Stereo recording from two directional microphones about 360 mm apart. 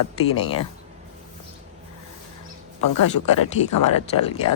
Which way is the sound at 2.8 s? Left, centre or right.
Left.